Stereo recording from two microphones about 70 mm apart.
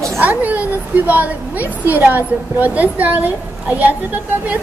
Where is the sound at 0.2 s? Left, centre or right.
Right.